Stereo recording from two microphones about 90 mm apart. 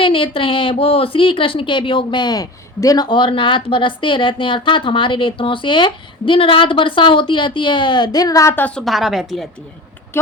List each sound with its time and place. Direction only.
0.0 s speech: 75° left (ahead or behind); by 3.1 s 40° left (ahead or behind)
3.1 s speech: 65° left (ahead or behind); by 8.4 s 45° left (ahead or behind)
8.4 s a woman's voice: 20° left (ahead or behind)
8.7 s a woman's voice: centre (ahead or behind)